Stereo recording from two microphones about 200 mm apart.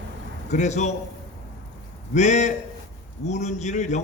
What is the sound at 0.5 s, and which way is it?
Speech, 35° left (ahead or behind).